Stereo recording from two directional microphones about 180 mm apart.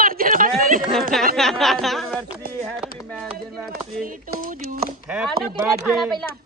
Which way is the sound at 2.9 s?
5° left (ahead or behind).